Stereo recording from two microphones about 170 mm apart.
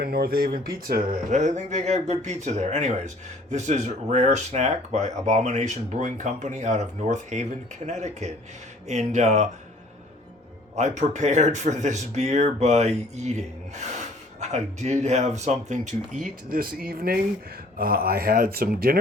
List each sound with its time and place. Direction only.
0.0 s speech: 65° right (ahead or behind); by 9.5 s 40° right (ahead or behind)
10.8 s speech: 45° right (ahead or behind); by 18.9 s 60° right (ahead or behind)